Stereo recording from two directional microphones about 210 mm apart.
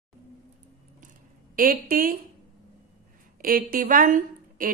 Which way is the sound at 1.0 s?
40° right (ahead or behind).